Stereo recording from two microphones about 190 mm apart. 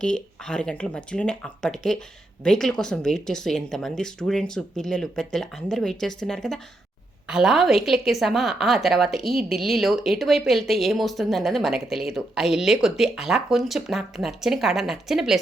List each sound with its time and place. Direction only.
0.0 s speech: 5° left (ahead or behind)